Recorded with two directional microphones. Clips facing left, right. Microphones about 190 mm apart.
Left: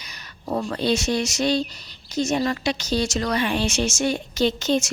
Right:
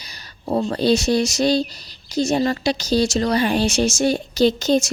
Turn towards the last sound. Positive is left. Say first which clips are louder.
# right 4 dB
turn(degrees=-40)  # may be behind; listen again after turning